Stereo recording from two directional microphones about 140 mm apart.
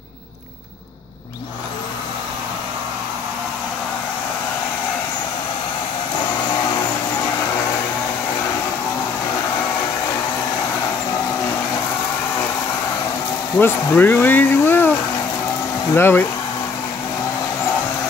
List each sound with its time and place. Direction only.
13.6 s speech: 15° left (ahead or behind)
15.9 s speech: 15° left (ahead or behind)